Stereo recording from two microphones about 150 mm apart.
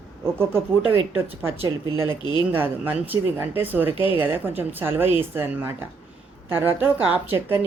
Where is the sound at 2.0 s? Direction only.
30° left (ahead or behind).